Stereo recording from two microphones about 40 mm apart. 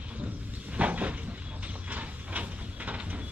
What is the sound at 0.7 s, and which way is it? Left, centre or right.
Cupboard open or close, right.